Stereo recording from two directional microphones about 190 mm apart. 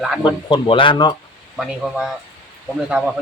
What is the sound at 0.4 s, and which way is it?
Speech, 25° left (ahead or behind).